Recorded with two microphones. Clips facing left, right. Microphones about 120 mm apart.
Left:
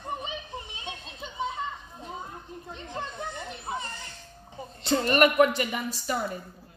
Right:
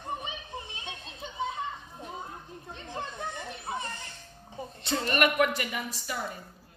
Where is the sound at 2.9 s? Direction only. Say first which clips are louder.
Left 1 dB; 20° left (ahead or behind).